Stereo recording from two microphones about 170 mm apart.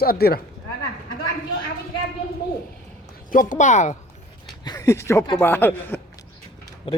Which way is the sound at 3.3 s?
50° left (ahead or behind).